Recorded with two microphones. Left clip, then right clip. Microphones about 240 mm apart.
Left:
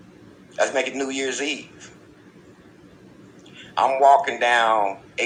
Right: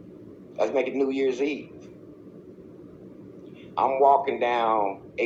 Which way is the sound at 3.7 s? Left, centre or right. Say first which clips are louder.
Left 4 dB; left.